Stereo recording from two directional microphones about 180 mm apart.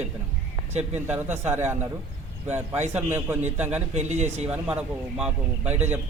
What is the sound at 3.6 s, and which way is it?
Speech, 10° right (ahead or behind).